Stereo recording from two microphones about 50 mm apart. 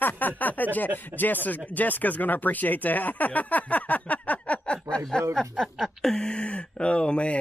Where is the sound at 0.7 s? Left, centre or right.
Left.